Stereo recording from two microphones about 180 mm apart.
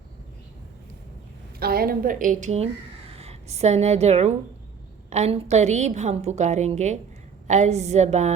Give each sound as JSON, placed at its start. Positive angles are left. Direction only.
{"t": 1.5, "sound": "a woman's voice", "side_deg": -55}